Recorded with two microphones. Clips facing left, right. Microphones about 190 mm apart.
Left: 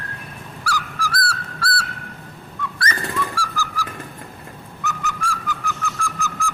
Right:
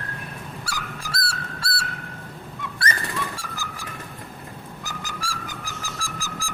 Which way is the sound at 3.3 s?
25° right (ahead or behind).